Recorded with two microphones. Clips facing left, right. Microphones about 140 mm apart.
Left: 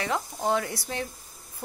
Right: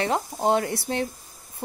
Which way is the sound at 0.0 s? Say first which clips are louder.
Right 5 dB; 25° right (ahead or behind).